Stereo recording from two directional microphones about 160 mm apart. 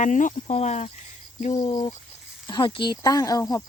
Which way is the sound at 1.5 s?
30° left (ahead or behind).